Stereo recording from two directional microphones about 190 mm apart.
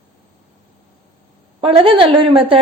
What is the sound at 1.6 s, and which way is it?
Speech, 30° right (ahead or behind).